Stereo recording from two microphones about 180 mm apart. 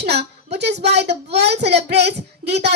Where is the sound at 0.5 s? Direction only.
65° right (ahead or behind).